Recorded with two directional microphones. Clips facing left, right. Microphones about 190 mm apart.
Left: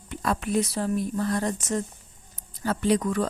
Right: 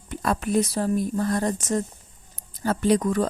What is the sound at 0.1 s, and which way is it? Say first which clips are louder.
Speech: right 2 dB; 40° right (ahead or behind).